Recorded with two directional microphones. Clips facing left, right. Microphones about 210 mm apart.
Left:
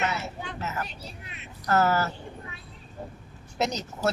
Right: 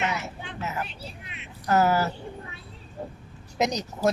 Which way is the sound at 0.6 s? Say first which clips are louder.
Right 2 dB; 15° right (ahead or behind).